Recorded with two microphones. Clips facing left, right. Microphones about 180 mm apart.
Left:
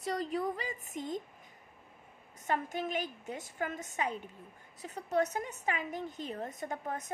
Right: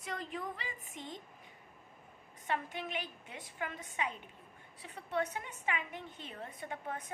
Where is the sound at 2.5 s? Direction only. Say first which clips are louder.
Left 4 dB; 45° left (ahead or behind).